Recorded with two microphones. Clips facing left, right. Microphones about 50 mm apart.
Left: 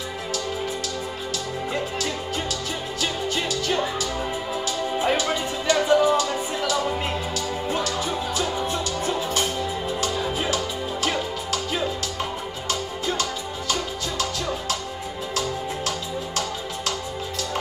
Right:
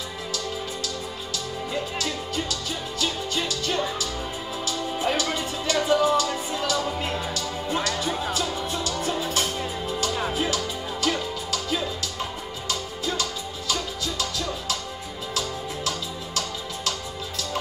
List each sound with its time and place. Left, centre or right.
3.0 s music: left
7.7 s music: right
8.4 s music: left